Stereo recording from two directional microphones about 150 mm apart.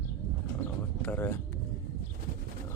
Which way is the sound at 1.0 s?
10° left (ahead or behind).